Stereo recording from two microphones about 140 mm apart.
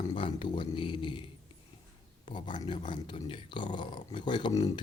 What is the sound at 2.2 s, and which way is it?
Speech, 35° left (ahead or behind).